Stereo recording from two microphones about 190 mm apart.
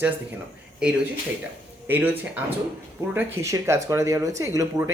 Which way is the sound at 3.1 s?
15° right (ahead or behind).